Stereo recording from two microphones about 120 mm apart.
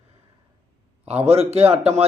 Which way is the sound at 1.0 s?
60° right (ahead or behind).